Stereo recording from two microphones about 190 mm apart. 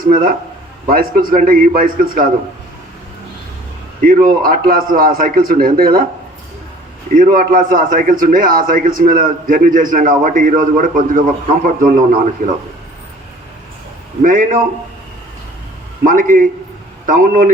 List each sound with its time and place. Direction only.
0.1 s a man's voice: 45° right (ahead or behind)
4.0 s a man's voice: 45° right (ahead or behind)
7.1 s a man's voice: 45° right (ahead or behind)
14.2 s a man's voice: 45° right (ahead or behind)
16.0 s a man's voice: 45° right (ahead or behind)